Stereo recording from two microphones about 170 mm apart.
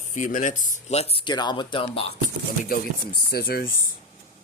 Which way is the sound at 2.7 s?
65° left (ahead or behind).